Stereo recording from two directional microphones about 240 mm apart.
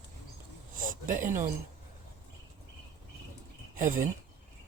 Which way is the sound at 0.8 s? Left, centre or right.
Right.